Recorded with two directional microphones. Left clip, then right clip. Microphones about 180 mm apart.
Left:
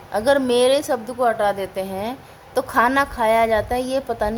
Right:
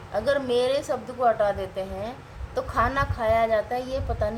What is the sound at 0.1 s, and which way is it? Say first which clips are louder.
A woman's voice: left 6 dB; 55° left (ahead or behind).